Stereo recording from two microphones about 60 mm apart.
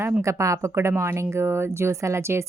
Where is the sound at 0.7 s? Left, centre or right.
Right.